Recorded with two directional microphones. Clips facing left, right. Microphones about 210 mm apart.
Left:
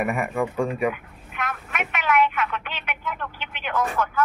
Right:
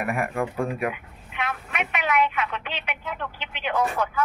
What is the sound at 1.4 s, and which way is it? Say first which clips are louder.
Telephone: even; 35° right (ahead or behind).